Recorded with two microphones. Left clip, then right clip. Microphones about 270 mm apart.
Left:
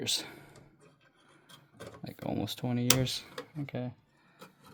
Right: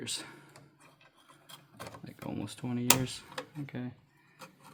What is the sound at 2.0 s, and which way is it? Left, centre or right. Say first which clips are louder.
Speech: left 7 dB; left.